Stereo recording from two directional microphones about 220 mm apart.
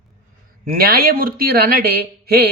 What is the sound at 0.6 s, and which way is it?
Speech, 40° right (ahead or behind).